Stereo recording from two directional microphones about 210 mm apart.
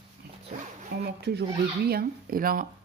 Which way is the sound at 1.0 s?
50° right (ahead or behind).